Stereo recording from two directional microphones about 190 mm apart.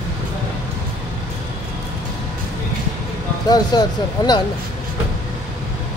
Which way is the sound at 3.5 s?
20° left (ahead or behind).